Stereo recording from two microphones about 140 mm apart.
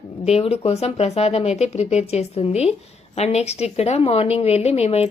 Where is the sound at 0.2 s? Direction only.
45° left (ahead or behind).